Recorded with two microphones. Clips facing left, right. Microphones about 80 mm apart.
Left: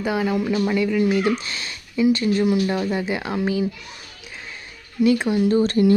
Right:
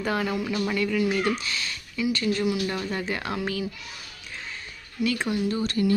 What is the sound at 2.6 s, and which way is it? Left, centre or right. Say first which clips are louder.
Speech: left 6 dB; centre.